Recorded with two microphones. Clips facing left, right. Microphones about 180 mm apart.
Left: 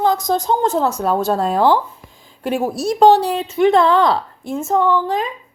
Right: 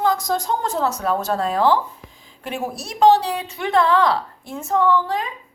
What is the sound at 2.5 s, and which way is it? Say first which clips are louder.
A woman's voice: left 9 dB; 35° left (ahead or behind).